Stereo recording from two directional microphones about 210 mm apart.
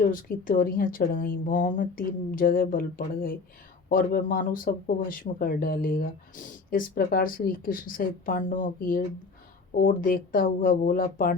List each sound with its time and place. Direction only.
0.0 s a woman's voice: 40° left (ahead or behind)